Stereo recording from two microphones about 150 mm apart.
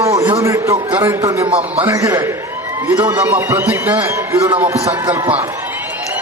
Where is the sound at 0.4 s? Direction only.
20° right (ahead or behind).